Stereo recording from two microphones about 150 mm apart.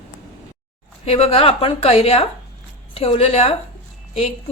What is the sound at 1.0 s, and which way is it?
A woman's voice, 40° left (ahead or behind).